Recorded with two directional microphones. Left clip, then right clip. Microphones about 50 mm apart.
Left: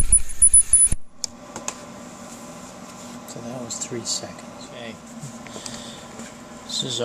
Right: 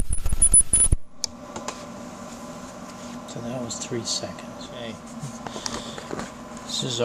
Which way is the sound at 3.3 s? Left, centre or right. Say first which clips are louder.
Right 2 dB; left.